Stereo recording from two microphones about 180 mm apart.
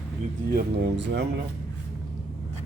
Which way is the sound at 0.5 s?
65° right (ahead or behind).